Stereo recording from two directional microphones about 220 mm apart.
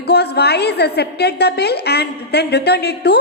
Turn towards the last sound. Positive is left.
turn(degrees=50)  # may be behind; listen again after turning